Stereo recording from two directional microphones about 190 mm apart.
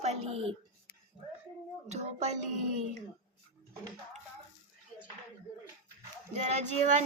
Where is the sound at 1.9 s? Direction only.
35° right (ahead or behind).